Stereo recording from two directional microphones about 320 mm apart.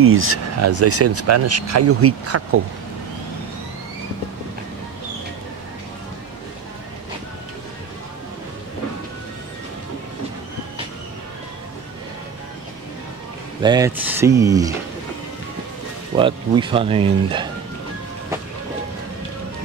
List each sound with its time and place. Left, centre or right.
0.0 s speech: right
13.6 s speech: centre
16.2 s speech: centre